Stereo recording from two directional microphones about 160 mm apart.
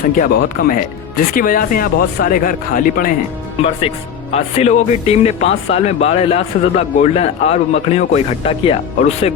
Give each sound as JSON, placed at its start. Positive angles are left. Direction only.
{"t": 0.2, "sound": "speech", "side_deg": 60}
{"t": 3.6, "sound": "speech", "side_deg": 40}